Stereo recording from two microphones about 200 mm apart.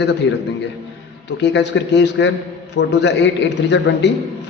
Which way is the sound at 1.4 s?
60° left (ahead or behind).